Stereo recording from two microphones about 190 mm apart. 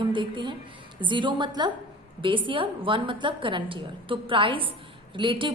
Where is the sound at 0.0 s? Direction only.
25° right (ahead or behind).